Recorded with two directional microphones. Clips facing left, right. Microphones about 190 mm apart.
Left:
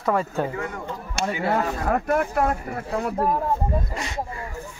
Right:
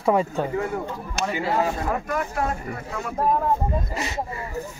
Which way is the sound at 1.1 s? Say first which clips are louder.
Left 1 dB; 60° left (ahead or behind).